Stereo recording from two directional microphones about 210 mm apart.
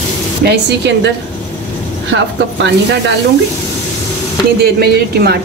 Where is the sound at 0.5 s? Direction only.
55° right (ahead or behind).